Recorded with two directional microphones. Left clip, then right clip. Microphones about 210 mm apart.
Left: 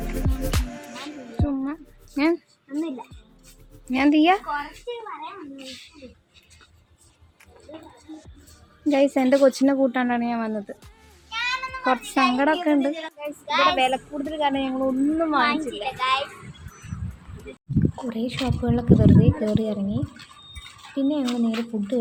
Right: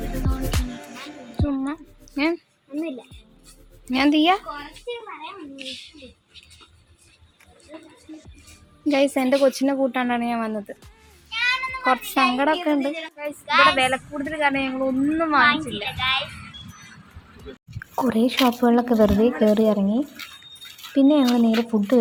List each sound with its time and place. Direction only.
0.2 s music: centre (ahead or behind)
2.1 s a sound: 15° left (ahead or behind)
3.9 s speech: 5° left (ahead or behind)
8.8 s a woman's voice: 10° left (ahead or behind)
13.4 s speech: 15° left (ahead or behind)
13.7 s speech: 5° right (ahead or behind)
15.6 s speech: 5° left (ahead or behind)
17.9 s speech: 30° right (ahead or behind)